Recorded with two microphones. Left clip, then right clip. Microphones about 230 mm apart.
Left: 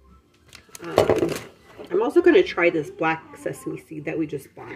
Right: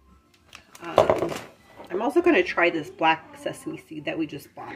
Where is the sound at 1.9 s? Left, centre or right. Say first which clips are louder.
Left 4 dB; right.